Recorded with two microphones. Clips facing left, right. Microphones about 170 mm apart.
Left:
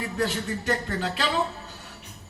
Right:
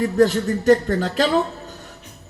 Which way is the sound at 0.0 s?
40° right (ahead or behind).